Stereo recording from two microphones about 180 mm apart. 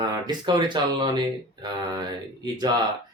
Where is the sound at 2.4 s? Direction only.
25° right (ahead or behind).